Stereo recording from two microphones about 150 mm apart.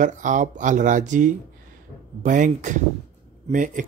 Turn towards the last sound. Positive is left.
turn(degrees=-60)  # may be behind; listen again after turning